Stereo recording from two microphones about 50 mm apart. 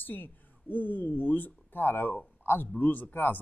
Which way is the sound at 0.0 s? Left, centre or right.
Left.